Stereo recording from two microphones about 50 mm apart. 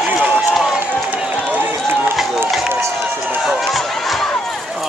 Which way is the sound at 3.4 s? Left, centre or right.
Centre.